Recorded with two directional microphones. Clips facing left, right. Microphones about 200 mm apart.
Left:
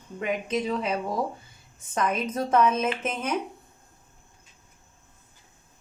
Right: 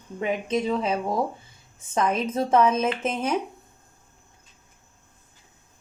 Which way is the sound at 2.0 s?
30° right (ahead or behind).